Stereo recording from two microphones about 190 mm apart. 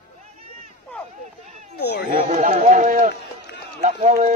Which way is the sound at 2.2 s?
40° right (ahead or behind).